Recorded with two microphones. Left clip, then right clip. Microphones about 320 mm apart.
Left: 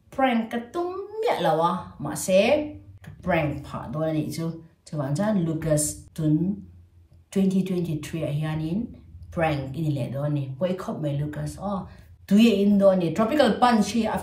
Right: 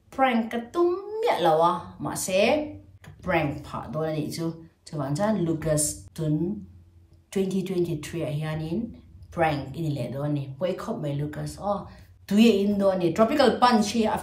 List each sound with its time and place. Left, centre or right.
0.1 s speech: centre